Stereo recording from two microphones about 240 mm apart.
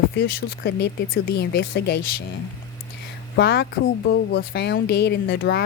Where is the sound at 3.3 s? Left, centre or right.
Left.